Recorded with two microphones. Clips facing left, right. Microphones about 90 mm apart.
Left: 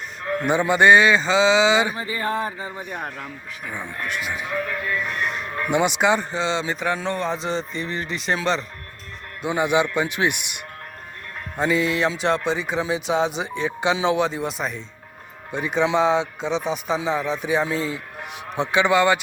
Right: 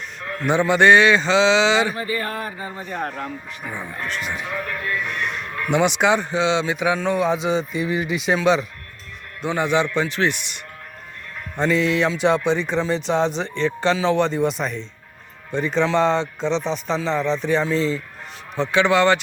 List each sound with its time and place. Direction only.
0.3 s music: 5° left (ahead or behind)
2.0 s a man's voice: 20° left (ahead or behind)
3.1 s music: 5° right (ahead or behind)
4.0 s music: 5° left (ahead or behind)
9.4 s a man's voice: 10° left (ahead or behind)
11.5 s music: 5° left (ahead or behind)
15.5 s a man's voice: 10° left (ahead or behind)